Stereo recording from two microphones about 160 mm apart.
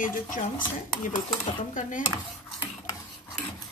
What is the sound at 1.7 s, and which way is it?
Speech, 55° left (ahead or behind).